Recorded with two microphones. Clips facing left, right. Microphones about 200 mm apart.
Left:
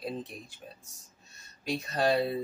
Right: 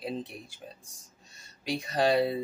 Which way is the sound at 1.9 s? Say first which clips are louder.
Right 2 dB; 15° right (ahead or behind).